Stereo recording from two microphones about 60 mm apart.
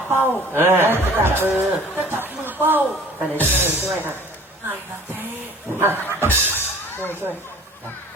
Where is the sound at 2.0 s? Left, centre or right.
Right.